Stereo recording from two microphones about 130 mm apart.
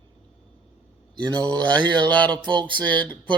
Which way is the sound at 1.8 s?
35° right (ahead or behind).